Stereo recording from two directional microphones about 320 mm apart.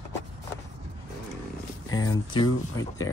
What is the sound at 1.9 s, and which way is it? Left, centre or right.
Speech, centre.